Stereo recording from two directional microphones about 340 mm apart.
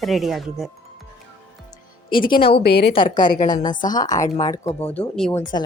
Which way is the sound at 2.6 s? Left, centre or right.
Left.